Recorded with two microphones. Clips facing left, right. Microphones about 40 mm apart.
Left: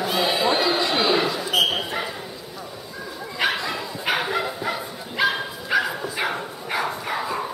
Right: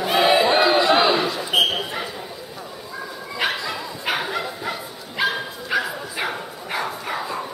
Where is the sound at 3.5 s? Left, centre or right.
Centre.